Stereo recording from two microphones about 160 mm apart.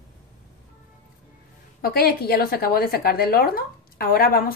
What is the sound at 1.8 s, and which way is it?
A woman's voice, 75° left (ahead or behind).